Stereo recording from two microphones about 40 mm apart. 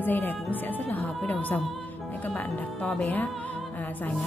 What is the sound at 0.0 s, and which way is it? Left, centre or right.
A woman's voice, left.